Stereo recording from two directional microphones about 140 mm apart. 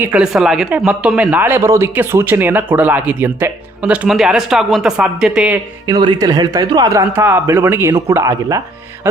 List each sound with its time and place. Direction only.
0.0 s speech: 10° right (ahead or behind)
5.9 s speech: 30° right (ahead or behind)